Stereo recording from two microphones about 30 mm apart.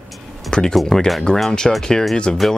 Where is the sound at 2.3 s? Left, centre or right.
Left.